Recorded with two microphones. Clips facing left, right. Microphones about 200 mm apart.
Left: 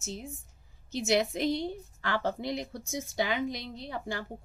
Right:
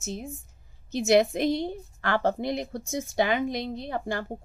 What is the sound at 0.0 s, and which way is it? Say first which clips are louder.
A woman's voice: right 5 dB; 50° right (ahead or behind).